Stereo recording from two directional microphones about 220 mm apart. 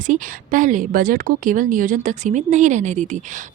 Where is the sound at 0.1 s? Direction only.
35° right (ahead or behind).